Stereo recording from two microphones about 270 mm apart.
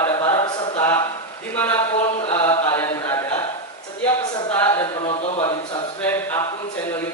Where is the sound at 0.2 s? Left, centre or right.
Centre.